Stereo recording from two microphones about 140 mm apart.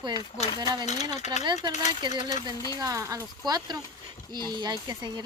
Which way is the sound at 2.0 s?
30° right (ahead or behind).